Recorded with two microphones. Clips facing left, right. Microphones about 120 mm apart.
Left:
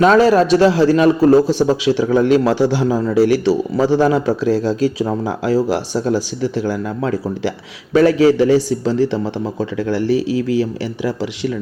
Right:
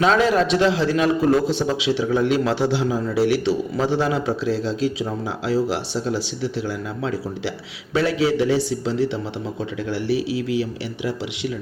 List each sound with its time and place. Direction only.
0.0 s speech: 45° left (ahead or behind)